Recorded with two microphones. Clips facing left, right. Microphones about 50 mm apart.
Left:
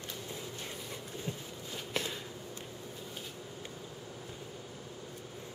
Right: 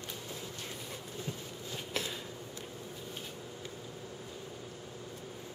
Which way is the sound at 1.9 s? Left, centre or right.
Centre.